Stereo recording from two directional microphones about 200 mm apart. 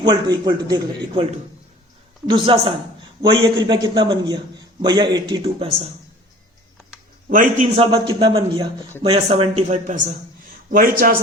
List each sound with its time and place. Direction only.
0.0 s a man's voice: 20° right (ahead or behind)
7.3 s a man's voice: 40° right (ahead or behind)
7.8 s a man's voice: 25° right (ahead or behind)